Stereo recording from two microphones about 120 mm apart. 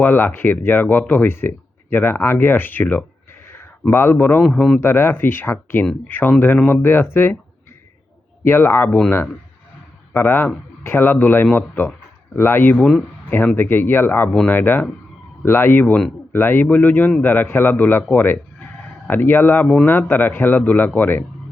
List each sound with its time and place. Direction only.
0.0 s speech: 15° left (ahead or behind)
4.4 s speech: 5° left (ahead or behind)
4.8 s speech: 20° left (ahead or behind)
8.4 s a man's voice: 20° left (ahead or behind)
19.6 s speech: 5° left (ahead or behind)
19.9 s speech: 15° left (ahead or behind)